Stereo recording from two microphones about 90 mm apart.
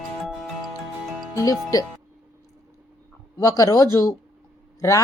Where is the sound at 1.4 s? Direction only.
40° left (ahead or behind).